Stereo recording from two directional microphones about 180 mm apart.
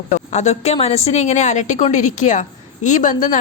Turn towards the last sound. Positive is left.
turn(degrees=45)  # may be behind; listen again after turning